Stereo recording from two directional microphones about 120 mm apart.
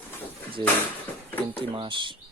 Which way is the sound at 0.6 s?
40° right (ahead or behind).